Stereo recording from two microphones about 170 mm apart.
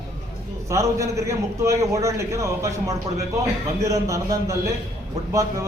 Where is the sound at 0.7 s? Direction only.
15° right (ahead or behind).